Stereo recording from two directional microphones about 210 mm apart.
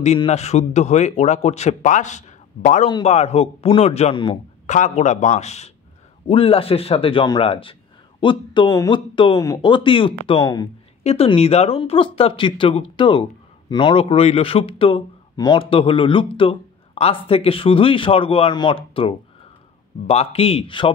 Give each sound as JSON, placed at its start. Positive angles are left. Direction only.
{"t": 0.0, "sound": "a man's voice", "side_deg": 30}